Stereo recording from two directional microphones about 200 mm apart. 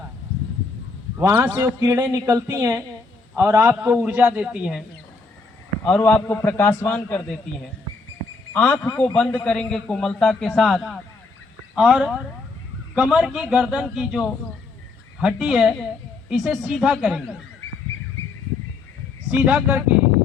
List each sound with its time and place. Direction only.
1.2 s a man's voice: 10° right (ahead or behind)
5.8 s a man's voice: 10° left (ahead or behind)
8.5 s a man's voice: 5° left (ahead or behind)
19.5 s a man's voice: 5° right (ahead or behind)